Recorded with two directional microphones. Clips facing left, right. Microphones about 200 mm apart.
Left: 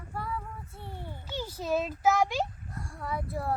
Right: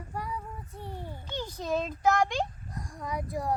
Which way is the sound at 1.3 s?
10° left (ahead or behind).